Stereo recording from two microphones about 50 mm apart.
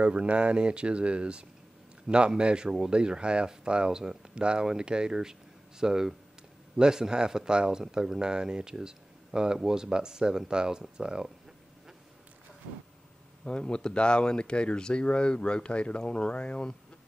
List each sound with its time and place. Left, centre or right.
0.0 s speech: right
13.4 s speech: centre